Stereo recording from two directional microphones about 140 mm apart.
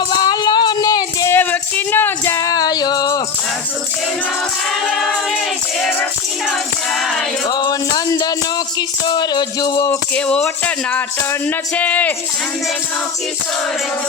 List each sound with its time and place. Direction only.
0.1 s music: 30° left (ahead or behind)
1.3 s music: 15° left (ahead or behind)
4.9 s choir: centre (ahead or behind)
6.9 s music: centre (ahead or behind)
7.4 s music: 30° left (ahead or behind)
10.2 s music: 10° left (ahead or behind)